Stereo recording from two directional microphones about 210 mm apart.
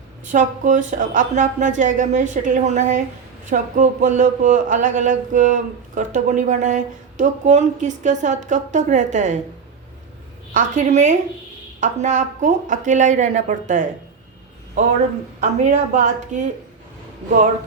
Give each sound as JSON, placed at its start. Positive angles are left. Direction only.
{"t": 0.3, "sound": "speech", "side_deg": -35}
{"t": 10.5, "sound": "speech", "side_deg": -35}
{"t": 15.4, "sound": "speech", "side_deg": -35}